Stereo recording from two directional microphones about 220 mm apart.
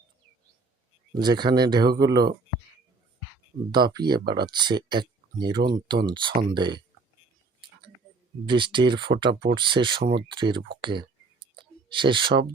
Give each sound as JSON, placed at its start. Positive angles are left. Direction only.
{"t": 1.1, "sound": "speech", "side_deg": -20}
{"t": 3.7, "sound": "speech", "side_deg": -20}
{"t": 8.4, "sound": "speech", "side_deg": -20}
{"t": 10.0, "sound": "speech", "side_deg": -45}
{"t": 10.3, "sound": "speech", "side_deg": -20}
{"t": 11.5, "sound": "a sound", "side_deg": -20}